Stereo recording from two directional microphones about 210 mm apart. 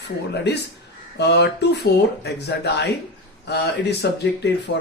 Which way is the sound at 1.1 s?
55° left (ahead or behind).